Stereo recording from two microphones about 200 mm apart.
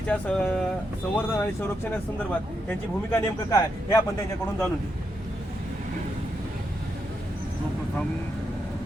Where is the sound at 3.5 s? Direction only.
15° left (ahead or behind).